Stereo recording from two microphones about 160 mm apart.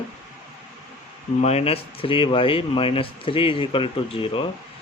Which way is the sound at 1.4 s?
40° left (ahead or behind).